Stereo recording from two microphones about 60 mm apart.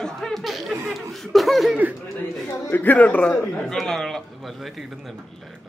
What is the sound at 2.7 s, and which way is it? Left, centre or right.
A man's voice, left.